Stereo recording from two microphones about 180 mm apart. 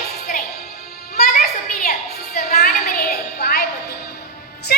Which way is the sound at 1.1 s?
50° left (ahead or behind).